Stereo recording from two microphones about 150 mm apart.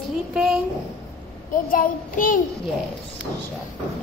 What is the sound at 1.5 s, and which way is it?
Child singing, 65° left (ahead or behind).